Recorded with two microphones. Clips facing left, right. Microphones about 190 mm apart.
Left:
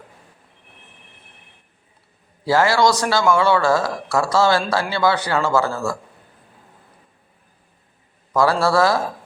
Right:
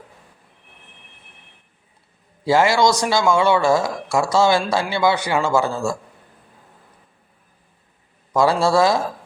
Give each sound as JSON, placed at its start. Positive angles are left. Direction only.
{"t": 2.4, "sound": "a man's voice", "side_deg": -15}
{"t": 8.3, "sound": "a man's voice", "side_deg": -15}